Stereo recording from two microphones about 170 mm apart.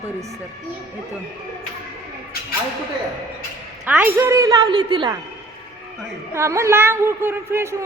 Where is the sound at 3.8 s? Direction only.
10° right (ahead or behind); by 5.1 s 25° right (ahead or behind).